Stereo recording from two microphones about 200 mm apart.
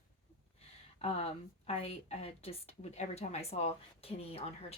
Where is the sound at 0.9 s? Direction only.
30° left (ahead or behind).